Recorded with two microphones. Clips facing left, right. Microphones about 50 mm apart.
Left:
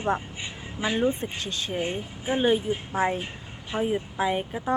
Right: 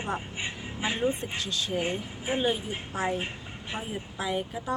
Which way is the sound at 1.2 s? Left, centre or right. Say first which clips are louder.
Left 1 dB; left.